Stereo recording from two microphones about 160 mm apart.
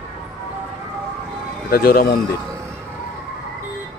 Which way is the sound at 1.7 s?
70° left (ahead or behind).